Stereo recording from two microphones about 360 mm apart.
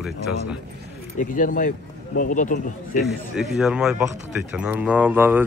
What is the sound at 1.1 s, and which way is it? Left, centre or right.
Speech, left.